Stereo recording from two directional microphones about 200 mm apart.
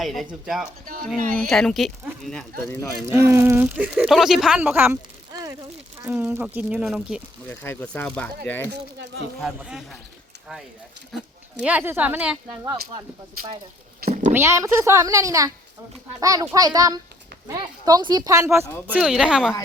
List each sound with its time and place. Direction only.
0.0 s speech: centre (ahead or behind)
3.1 s speech: 15° right (ahead or behind)
7.4 s speech: 10° left (ahead or behind)
9.4 s speech: 5° right (ahead or behind)
11.1 s speech: centre (ahead or behind)
14.1 s a child's voice: 30° right (ahead or behind)
14.3 s a child's voice: 15° right (ahead or behind)